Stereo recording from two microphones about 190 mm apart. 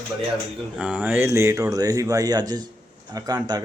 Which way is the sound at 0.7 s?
5° right (ahead or behind).